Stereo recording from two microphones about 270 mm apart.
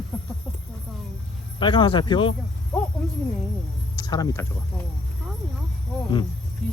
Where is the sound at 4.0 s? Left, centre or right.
Centre.